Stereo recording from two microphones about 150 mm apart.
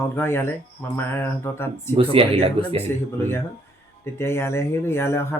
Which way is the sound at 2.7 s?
15° left (ahead or behind).